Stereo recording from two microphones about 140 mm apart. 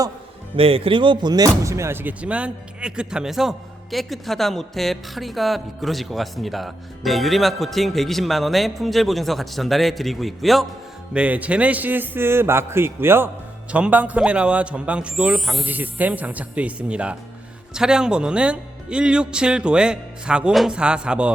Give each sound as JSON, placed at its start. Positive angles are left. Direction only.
{"t": 0.5, "sound": "a man's voice", "side_deg": -40}